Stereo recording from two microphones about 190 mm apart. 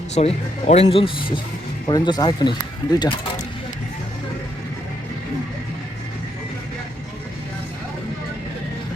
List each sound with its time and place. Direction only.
0.1 s speech: 35° left (ahead or behind)